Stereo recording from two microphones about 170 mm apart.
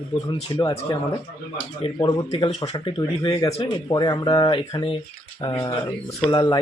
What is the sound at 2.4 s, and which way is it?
Speech, 40° left (ahead or behind).